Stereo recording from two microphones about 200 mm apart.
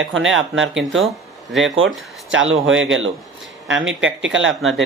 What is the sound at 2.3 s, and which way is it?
Speech, 75° right (ahead or behind).